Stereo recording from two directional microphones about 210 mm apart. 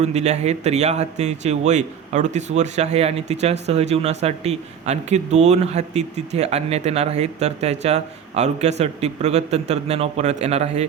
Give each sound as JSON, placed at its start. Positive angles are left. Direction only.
{"t": 0.0, "sound": "speech", "side_deg": -30}